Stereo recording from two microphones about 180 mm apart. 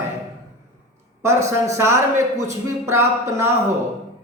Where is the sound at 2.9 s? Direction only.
15° right (ahead or behind).